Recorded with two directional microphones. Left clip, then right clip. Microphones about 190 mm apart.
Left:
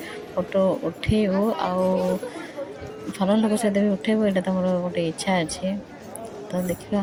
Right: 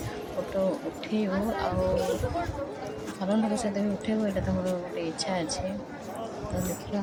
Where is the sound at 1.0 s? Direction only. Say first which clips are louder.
Left 7 dB; 25° left (ahead or behind).